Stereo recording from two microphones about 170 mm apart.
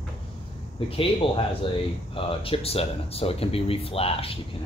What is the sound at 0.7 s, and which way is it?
Speech, 30° left (ahead or behind).